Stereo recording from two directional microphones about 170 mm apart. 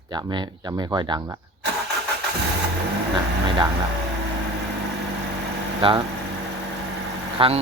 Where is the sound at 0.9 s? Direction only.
20° right (ahead or behind).